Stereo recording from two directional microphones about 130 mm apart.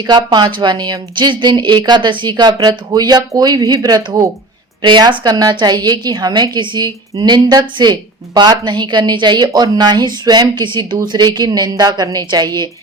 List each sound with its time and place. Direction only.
0.1 s a woman's voice: 30° right (ahead or behind)